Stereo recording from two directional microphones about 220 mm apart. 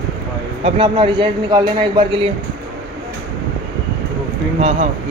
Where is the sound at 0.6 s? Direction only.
20° right (ahead or behind).